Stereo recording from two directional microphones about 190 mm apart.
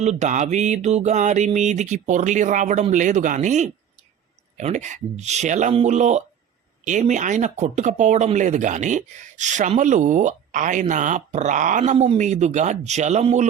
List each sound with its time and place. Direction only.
0.0 s speech: 40° right (ahead or behind)